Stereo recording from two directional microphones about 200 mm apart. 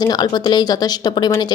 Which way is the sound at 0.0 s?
20° left (ahead or behind).